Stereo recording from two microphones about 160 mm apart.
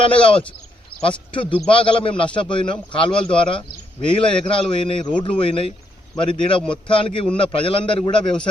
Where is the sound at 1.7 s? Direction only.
35° left (ahead or behind).